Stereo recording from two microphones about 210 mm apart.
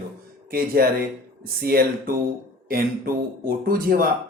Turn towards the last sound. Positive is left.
turn(degrees=-45)  # may be behind; listen again after turning